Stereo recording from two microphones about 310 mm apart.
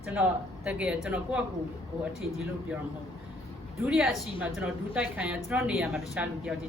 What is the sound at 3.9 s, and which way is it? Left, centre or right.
A woman's voice, centre.